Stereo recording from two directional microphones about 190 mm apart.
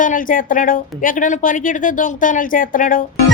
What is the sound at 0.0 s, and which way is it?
A woman's voice, 45° left (ahead or behind).